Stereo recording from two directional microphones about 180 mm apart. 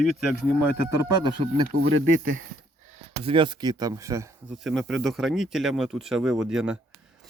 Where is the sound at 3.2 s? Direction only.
30° right (ahead or behind).